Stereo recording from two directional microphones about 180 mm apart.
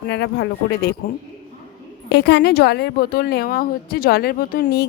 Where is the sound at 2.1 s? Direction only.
70° left (ahead or behind).